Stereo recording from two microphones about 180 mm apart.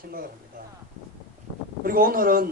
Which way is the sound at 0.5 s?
50° right (ahead or behind).